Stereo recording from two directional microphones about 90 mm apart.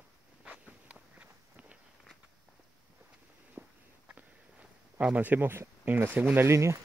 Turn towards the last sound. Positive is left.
turn(degrees=-30)  # may be behind; listen again after turning